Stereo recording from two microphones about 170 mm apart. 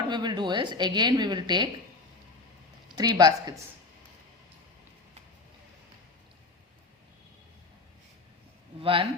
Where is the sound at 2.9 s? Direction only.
25° right (ahead or behind).